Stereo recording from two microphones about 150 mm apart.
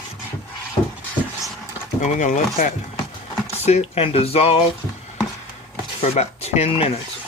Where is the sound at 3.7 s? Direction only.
45° left (ahead or behind).